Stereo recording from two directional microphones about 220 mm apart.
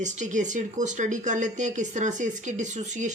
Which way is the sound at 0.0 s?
35° right (ahead or behind).